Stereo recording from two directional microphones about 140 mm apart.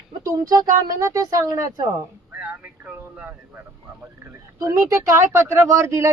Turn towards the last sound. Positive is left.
turn(degrees=-20)  # may be behind; listen again after turning